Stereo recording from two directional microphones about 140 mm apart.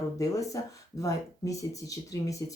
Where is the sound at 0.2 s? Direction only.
25° left (ahead or behind).